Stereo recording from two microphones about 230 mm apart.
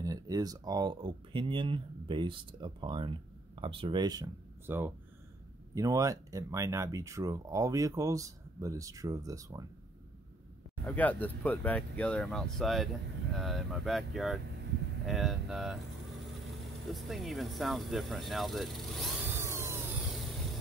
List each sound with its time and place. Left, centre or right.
0.0 s speech: centre
10.9 s speech: centre
19.3 s vehicle: centre